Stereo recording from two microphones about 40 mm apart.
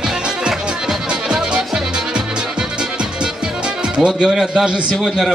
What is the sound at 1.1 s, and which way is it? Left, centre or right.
Music, centre.